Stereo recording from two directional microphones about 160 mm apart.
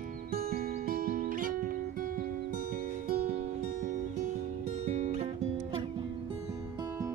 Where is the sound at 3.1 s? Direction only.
65° right (ahead or behind).